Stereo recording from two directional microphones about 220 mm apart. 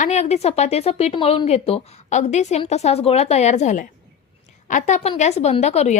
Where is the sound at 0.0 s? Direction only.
30° left (ahead or behind).